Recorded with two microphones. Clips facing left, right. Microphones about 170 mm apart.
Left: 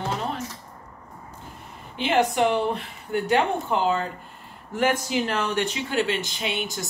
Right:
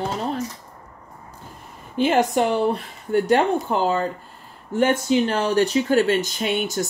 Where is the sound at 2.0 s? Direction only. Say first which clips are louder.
Right 3 dB; 40° right (ahead or behind).